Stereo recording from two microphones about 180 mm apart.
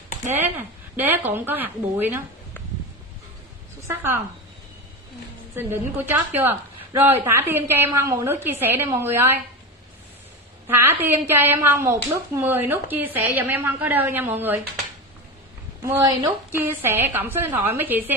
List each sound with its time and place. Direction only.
0.3 s a woman's voice: 10° right (ahead or behind)
3.8 s a woman's voice: 15° right (ahead or behind)
5.6 s a woman's voice: 10° right (ahead or behind)
10.7 s a woman's voice: 10° right (ahead or behind)
15.8 s a woman's voice: 20° right (ahead or behind)